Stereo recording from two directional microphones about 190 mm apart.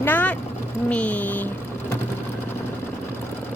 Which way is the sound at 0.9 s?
5° left (ahead or behind).